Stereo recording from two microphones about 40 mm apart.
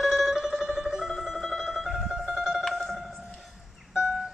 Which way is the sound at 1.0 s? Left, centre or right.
Centre.